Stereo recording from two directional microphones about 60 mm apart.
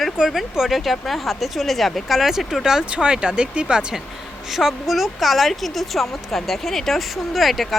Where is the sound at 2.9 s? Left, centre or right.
Centre.